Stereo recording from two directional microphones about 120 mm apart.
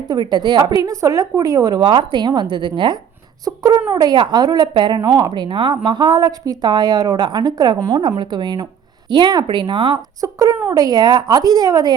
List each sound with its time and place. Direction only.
0.1 s a woman's voice: 35° right (ahead or behind)
1.8 s a woman's voice: 45° right (ahead or behind)
10.2 s a woman's voice: 30° right (ahead or behind)